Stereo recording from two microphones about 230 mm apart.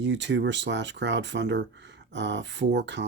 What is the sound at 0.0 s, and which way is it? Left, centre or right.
Speech, right.